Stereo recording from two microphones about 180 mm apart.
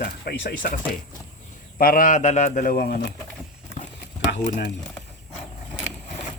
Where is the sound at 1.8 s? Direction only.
50° left (ahead or behind).